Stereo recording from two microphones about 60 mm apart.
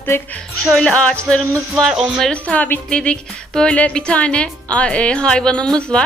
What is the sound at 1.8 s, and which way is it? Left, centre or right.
Speech, centre.